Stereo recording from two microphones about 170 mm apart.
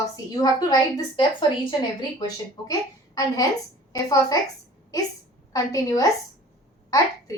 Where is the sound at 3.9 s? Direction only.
20° left (ahead or behind).